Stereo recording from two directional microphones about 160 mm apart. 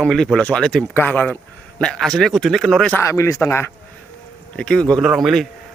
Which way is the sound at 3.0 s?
20° left (ahead or behind).